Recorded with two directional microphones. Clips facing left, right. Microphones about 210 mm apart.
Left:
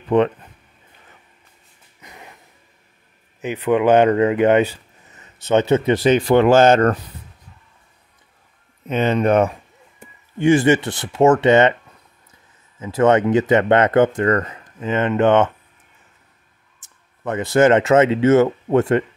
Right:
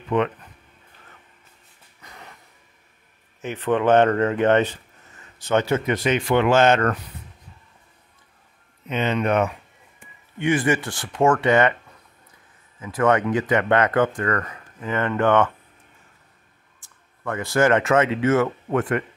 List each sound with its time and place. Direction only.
0.1 s speech: 30° left (ahead or behind)
2.0 s music: 20° left (ahead or behind)
3.3 s speech: 15° left (ahead or behind); by 7.0 s 35° left (ahead or behind)
8.8 s speech: 40° left (ahead or behind); by 11.7 s 25° left (ahead or behind)
12.8 s speech: 25° left (ahead or behind)
16.8 s speech: 20° left (ahead or behind)